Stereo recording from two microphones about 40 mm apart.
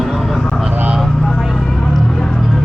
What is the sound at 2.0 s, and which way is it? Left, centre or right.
Music, centre.